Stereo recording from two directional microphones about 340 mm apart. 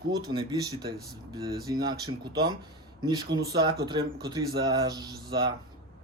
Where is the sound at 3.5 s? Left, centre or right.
Centre.